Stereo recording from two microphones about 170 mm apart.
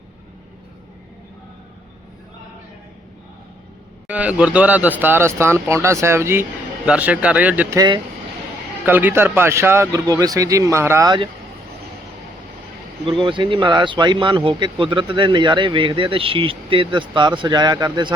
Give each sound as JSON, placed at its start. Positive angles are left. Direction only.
{"t": 4.0, "sound": "speech", "side_deg": -10}
{"t": 7.8, "sound": "speech", "side_deg": -25}
{"t": 8.8, "sound": "speech", "side_deg": -10}
{"t": 13.1, "sound": "speech", "side_deg": -30}